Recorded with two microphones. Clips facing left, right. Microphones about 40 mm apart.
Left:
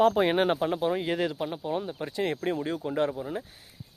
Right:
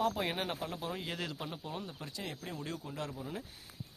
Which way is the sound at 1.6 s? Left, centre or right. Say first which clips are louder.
Left 11 dB; left.